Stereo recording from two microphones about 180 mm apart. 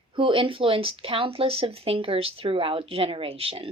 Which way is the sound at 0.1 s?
30° right (ahead or behind).